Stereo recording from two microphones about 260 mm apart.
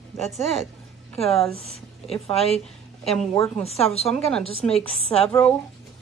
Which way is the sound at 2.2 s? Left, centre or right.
Left.